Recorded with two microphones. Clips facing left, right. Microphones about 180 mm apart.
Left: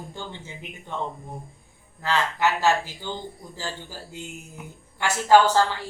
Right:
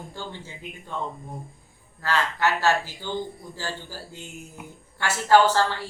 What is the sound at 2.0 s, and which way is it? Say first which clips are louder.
Speech: left 1 dB; 15° left (ahead or behind).